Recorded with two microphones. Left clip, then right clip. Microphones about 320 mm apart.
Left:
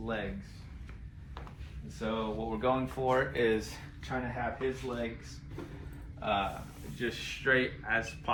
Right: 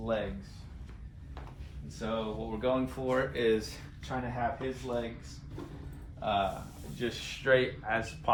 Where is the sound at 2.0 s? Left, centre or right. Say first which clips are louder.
Even; centre.